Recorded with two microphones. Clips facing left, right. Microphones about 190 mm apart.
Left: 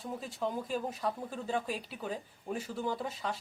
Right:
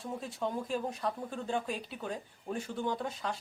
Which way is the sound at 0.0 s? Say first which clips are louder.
Even; centre (ahead or behind).